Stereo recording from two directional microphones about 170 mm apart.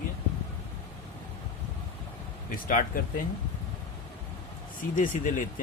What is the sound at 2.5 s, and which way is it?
Speech, 55° left (ahead or behind).